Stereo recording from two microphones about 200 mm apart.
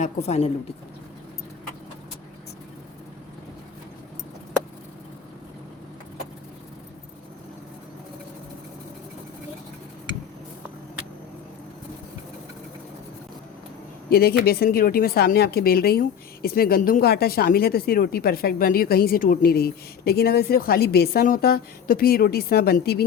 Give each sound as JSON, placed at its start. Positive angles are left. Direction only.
{"t": 0.0, "sound": "a woman's voice", "side_deg": 30}
{"t": 14.1, "sound": "a woman's voice", "side_deg": 50}